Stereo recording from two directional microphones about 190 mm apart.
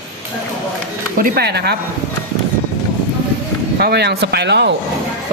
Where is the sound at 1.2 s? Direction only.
55° right (ahead or behind).